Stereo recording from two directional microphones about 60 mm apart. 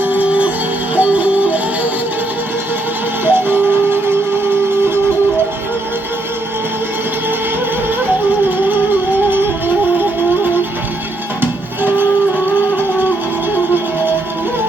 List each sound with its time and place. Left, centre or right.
0.0 s music: right
3.2 s music: right
11.3 s music: right